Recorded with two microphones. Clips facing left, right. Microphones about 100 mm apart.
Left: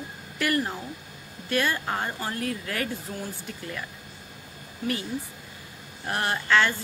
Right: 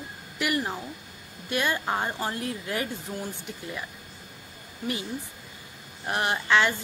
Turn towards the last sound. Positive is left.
turn(degrees=-15)  # may be behind; listen again after turning